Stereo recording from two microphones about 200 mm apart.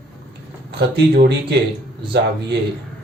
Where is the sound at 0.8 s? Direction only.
55° right (ahead or behind).